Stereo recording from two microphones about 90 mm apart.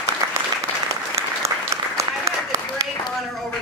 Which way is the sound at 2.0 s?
35° right (ahead or behind).